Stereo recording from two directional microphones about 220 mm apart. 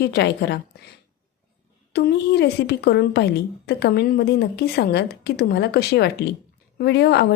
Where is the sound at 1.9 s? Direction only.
50° left (ahead or behind).